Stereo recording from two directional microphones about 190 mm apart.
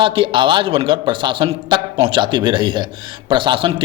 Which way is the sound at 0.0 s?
25° right (ahead or behind).